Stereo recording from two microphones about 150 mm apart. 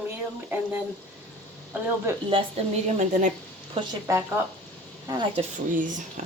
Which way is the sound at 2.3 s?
40° right (ahead or behind).